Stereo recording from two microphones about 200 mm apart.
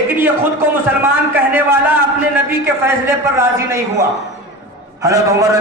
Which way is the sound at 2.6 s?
10° right (ahead or behind).